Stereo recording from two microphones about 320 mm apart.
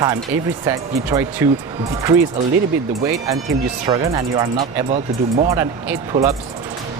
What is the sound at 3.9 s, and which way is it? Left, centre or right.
Speech, centre.